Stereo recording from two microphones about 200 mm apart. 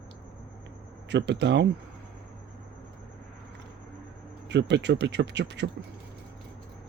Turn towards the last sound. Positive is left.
turn(degrees=-60)  # may be behind; listen again after turning